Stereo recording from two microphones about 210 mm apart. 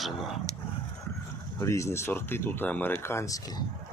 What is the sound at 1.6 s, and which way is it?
Speech, 15° left (ahead or behind).